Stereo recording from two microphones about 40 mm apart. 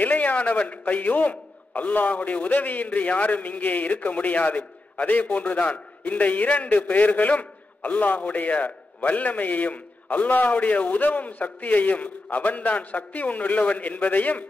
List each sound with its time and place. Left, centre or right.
0.0 s a man's voice: left